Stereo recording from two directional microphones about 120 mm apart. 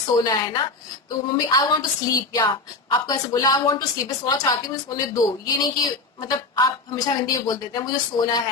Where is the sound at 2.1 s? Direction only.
35° left (ahead or behind).